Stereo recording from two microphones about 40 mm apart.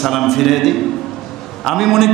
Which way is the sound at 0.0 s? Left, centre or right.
Centre.